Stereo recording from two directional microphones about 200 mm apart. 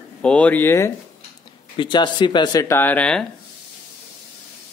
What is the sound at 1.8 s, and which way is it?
Speech, 25° left (ahead or behind).